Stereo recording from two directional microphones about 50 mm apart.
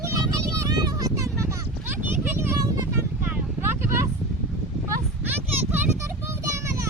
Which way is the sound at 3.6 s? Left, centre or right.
Right.